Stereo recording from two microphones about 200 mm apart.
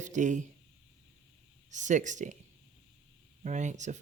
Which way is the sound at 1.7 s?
40° right (ahead or behind).